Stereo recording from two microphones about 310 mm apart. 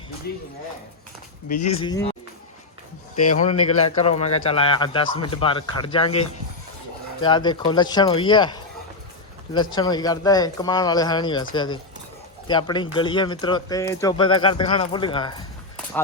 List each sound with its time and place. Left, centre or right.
1.5 s speech: centre
3.3 s speech: left
9.6 s speech: centre